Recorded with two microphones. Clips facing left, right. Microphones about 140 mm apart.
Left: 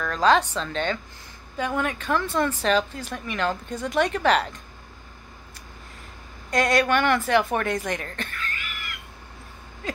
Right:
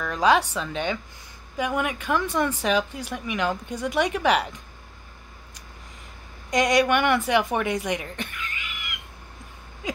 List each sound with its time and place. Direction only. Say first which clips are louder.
0.0 s speech: even; 15° right (ahead or behind)
6.5 s a woman's voice: right 1 dB; 15° right (ahead or behind)